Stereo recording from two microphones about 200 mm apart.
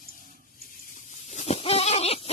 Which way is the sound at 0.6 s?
40° left (ahead or behind).